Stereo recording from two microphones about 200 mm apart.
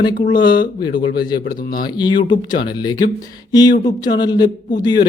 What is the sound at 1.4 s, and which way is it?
Speech, 50° left (ahead or behind).